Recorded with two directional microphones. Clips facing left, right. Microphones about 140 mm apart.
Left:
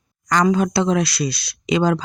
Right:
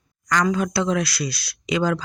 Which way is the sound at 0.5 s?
25° left (ahead or behind).